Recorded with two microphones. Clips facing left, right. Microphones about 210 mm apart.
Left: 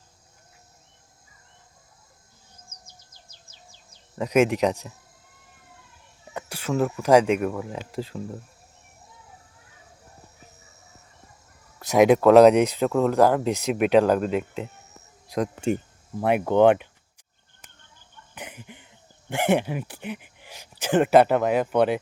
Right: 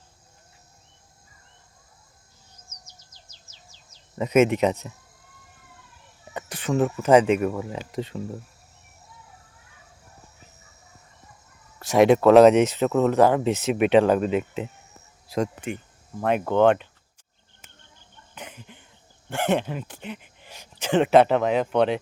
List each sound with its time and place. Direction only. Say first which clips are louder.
2.6 s bird vocalization: left 1 dB; 55° left (ahead or behind)
4.1 s speech: right 1 dB; centre (ahead or behind)
6.3 s speech: right 1 dB; 5° left (ahead or behind)
11.9 s speech: even; centre (ahead or behind)
16.2 s speech: left 1 dB; 10° left (ahead or behind)
18.3 s a sound: left 1 dB; 10° left (ahead or behind)
19.3 s speech: left 2 dB; 10° left (ahead or behind)